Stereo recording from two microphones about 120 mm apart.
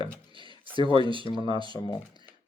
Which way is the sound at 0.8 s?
40° right (ahead or behind).